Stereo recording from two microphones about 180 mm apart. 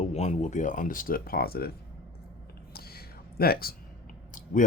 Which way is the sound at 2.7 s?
60° left (ahead or behind).